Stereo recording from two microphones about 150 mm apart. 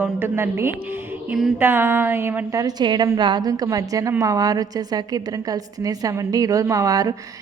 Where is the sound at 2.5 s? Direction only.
25° right (ahead or behind).